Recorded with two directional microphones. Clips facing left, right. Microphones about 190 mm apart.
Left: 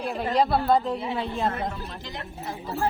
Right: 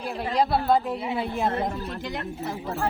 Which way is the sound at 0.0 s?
Centre (ahead or behind).